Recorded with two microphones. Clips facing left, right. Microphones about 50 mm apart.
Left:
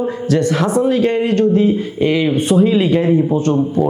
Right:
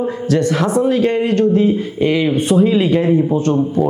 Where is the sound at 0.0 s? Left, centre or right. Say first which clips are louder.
Even; left.